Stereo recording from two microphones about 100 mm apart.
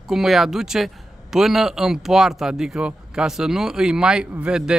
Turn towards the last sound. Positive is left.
turn(degrees=-10)  # may be behind; listen again after turning